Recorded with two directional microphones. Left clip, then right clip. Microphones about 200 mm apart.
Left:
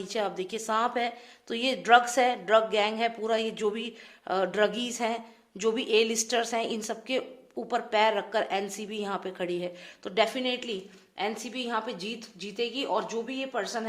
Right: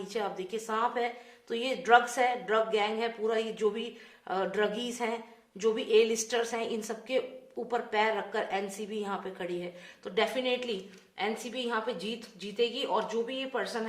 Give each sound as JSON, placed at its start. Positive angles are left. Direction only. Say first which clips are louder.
{"t": 0.1, "sound": "a woman's voice", "louder": "left 3 dB", "side_deg": 45}